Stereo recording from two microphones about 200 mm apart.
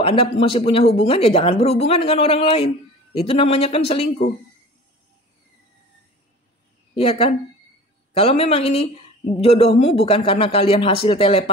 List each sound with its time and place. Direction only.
0.0 s speech: 30° left (ahead or behind)
7.0 s speech: 30° left (ahead or behind)